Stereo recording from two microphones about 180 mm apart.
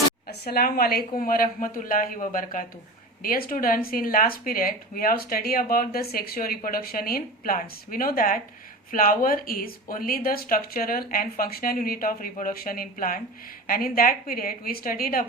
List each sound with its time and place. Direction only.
0.3 s speech: 60° left (ahead or behind)